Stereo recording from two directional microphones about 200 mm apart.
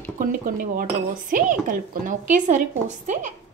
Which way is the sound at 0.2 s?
45° right (ahead or behind).